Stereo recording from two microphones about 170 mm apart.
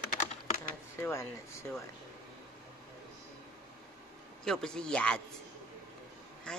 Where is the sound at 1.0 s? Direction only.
15° left (ahead or behind).